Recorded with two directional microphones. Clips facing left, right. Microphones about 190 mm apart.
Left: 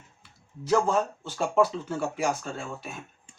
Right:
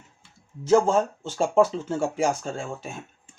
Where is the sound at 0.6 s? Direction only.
25° right (ahead or behind).